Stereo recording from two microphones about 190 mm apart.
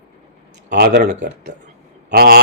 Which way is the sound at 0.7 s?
60° right (ahead or behind).